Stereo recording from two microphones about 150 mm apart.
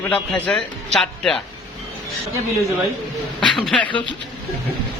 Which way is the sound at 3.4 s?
5° left (ahead or behind).